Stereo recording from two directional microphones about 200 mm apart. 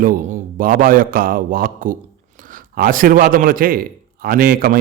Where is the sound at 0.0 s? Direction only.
45° right (ahead or behind).